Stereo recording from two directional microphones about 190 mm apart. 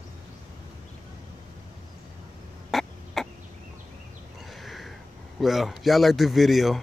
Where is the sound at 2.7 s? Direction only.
Centre (ahead or behind).